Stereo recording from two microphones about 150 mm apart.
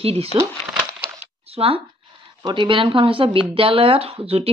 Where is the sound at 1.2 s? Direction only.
40° right (ahead or behind).